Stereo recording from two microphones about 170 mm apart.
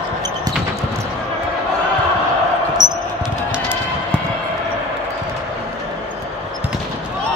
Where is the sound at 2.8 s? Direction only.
25° right (ahead or behind).